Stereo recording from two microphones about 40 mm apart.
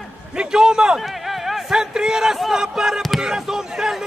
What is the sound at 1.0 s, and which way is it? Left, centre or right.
A man's voice, centre.